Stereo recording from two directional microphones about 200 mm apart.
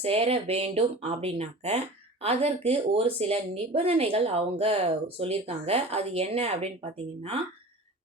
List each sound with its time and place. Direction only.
0.0 s speech: 30° right (ahead or behind)